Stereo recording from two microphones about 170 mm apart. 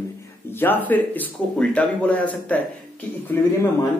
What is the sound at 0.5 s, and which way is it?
Speech, 10° left (ahead or behind).